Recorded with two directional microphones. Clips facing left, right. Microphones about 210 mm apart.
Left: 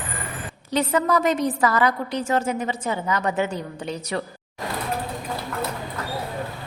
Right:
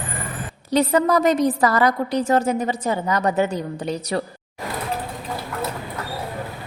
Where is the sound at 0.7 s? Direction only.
35° right (ahead or behind).